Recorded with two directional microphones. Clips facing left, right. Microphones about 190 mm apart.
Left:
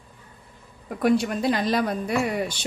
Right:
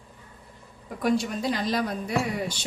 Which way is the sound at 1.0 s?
60° left (ahead or behind).